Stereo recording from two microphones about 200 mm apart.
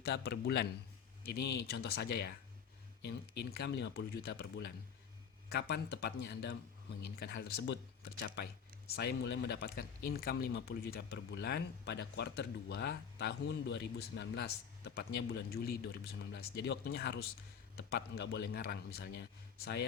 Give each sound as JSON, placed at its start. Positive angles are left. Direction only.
{"t": 0.0, "sound": "a man's voice", "side_deg": 55}